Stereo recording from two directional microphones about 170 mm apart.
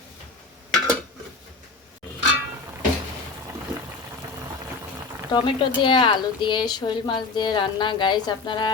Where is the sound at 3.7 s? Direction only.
20° right (ahead or behind).